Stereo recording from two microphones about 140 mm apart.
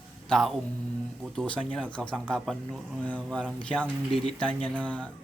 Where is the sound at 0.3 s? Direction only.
Centre (ahead or behind).